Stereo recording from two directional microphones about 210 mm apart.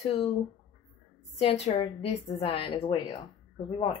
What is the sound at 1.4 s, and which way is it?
A woman's voice, 30° left (ahead or behind).